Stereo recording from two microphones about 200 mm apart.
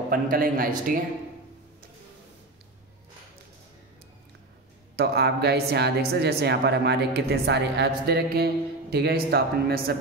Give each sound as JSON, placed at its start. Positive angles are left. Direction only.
{"t": 0.1, "sound": "speech", "side_deg": -45}
{"t": 4.9, "sound": "speech", "side_deg": -55}